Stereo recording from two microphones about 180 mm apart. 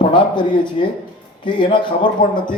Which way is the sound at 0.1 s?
25° left (ahead or behind).